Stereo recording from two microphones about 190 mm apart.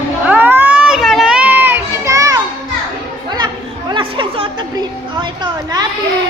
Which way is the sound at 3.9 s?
25° right (ahead or behind).